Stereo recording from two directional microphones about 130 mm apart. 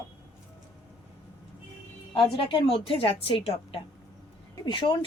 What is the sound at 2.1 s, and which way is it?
Speech, 40° left (ahead or behind).